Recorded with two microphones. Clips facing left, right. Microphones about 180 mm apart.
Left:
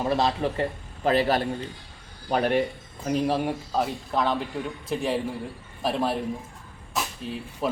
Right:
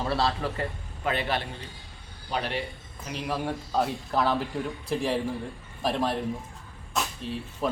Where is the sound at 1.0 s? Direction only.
35° left (ahead or behind).